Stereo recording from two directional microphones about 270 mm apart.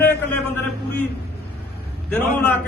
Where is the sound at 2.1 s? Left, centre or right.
Centre.